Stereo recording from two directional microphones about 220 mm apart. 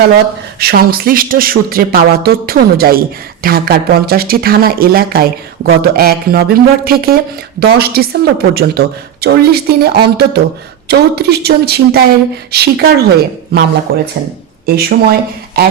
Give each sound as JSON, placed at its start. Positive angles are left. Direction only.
{"t": 0.6, "sound": "speech", "side_deg": -45}
{"t": 14.8, "sound": "speech", "side_deg": -45}